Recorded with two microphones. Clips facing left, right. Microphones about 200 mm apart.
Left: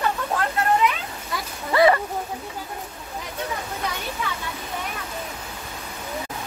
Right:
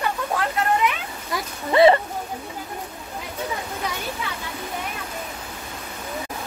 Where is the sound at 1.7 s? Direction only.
25° right (ahead or behind).